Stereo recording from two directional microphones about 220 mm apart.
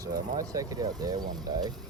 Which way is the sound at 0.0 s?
15° right (ahead or behind).